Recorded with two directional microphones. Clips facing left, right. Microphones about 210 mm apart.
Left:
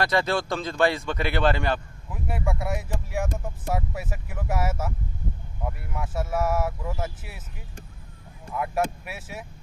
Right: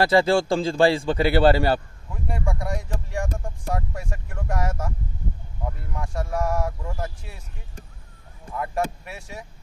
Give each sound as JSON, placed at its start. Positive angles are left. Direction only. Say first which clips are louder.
{"t": 0.0, "sound": "a man's voice", "louder": "right 6 dB", "side_deg": -30}
{"t": 2.0, "sound": "speech", "louder": "even", "side_deg": 5}
{"t": 8.5, "sound": "speech", "louder": "even", "side_deg": 5}